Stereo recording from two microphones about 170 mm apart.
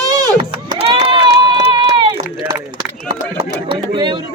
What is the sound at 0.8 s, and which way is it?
Run, 35° right (ahead or behind).